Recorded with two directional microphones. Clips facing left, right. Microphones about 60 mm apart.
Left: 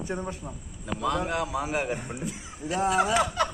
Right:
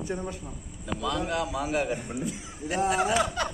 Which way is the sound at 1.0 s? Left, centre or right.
Left.